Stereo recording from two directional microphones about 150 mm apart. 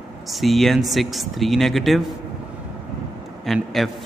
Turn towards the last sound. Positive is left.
turn(degrees=0)  # may be behind; listen again after turning